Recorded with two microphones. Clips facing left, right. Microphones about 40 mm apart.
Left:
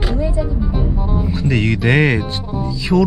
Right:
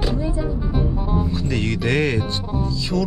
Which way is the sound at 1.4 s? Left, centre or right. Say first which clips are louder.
Left 6 dB; centre.